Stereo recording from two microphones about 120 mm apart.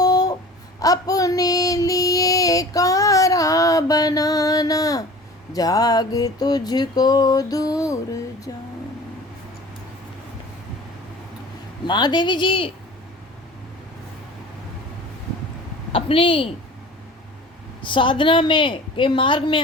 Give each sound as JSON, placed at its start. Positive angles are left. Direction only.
{"t": 0.0, "sound": "a sound", "side_deg": 30}
{"t": 0.8, "sound": "child singing", "side_deg": 30}
{"t": 5.5, "sound": "music", "side_deg": 30}
{"t": 8.5, "sound": "vehicle", "side_deg": 30}
{"t": 11.9, "sound": "music", "side_deg": 40}
{"t": 15.9, "sound": "a woman's voice", "side_deg": 50}
{"t": 17.8, "sound": "a woman's voice", "side_deg": 45}